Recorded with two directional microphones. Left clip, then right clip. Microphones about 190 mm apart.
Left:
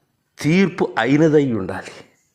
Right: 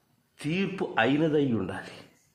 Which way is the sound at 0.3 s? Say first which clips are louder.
Left 12 dB; 40° left (ahead or behind).